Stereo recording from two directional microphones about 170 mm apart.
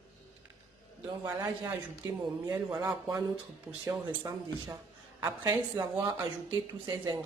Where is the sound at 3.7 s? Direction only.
5° right (ahead or behind).